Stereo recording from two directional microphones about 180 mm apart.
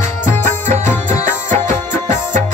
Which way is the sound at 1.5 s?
45° right (ahead or behind).